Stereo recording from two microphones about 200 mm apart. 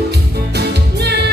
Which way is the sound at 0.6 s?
55° right (ahead or behind).